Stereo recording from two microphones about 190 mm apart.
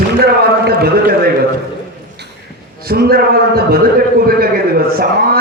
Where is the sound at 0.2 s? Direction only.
55° right (ahead or behind).